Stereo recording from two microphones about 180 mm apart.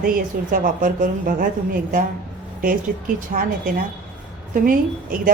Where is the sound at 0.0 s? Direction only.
50° right (ahead or behind).